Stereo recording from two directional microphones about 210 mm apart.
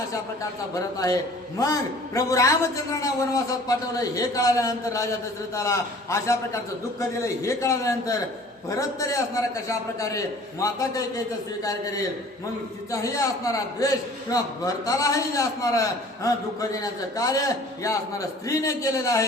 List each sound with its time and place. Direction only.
0.7 s a man's voice: 15° left (ahead or behind)